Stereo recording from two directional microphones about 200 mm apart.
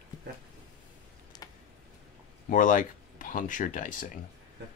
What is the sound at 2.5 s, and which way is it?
Speech, 40° left (ahead or behind).